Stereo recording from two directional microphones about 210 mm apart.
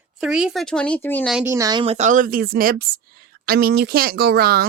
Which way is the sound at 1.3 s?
10° right (ahead or behind).